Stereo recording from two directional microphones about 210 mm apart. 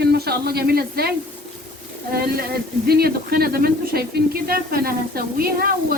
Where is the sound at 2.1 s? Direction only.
45° right (ahead or behind).